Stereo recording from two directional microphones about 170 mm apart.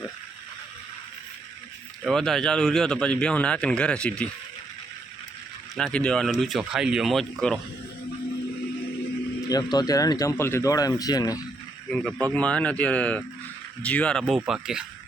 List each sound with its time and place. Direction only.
2.0 s a man's voice: centre (ahead or behind)
5.7 s a man's voice: 5° left (ahead or behind)
9.5 s speech: 25° left (ahead or behind)
11.9 s a man's voice: 5° left (ahead or behind)